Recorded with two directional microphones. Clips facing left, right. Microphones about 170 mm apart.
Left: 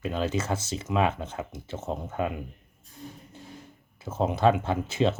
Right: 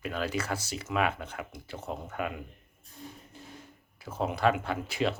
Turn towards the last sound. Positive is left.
turn(degrees=25)  # may be behind; listen again after turning